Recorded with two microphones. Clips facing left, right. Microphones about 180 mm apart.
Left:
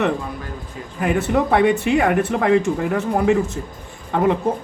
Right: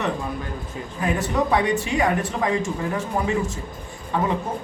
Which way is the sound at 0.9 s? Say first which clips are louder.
Left 4 dB; 60° left (ahead or behind).